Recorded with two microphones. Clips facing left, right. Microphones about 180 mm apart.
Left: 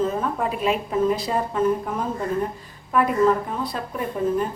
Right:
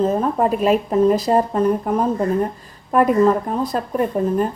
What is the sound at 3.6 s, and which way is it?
Speech, 45° right (ahead or behind).